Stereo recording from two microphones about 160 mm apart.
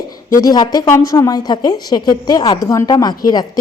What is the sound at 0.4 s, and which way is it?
A woman's voice, 25° left (ahead or behind).